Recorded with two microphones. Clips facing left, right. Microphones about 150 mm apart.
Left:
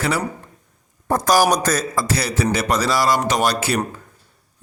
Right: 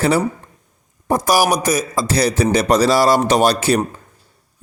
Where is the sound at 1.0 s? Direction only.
10° right (ahead or behind); by 3.9 s 30° right (ahead or behind).